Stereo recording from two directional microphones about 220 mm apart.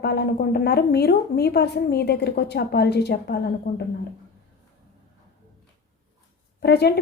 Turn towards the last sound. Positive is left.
turn(degrees=50)  # may be behind; listen again after turning